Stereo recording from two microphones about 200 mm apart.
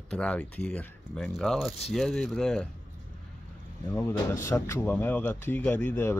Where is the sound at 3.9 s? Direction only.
10° left (ahead or behind).